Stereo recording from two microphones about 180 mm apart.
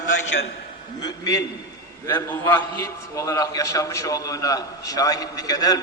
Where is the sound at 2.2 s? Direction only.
10° left (ahead or behind).